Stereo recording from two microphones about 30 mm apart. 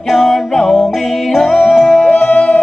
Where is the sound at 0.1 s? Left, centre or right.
Centre.